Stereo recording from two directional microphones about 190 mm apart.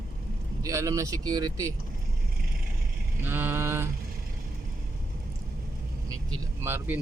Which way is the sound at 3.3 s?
10° right (ahead or behind).